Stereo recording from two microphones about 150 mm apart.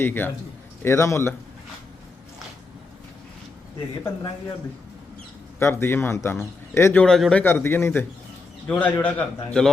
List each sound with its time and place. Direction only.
0.0 s a man's voice: 15° left (ahead or behind)
5.5 s a man's voice: 15° left (ahead or behind)
7.0 s a man's voice: 5° left (ahead or behind)
7.4 s a man's voice: 15° left (ahead or behind)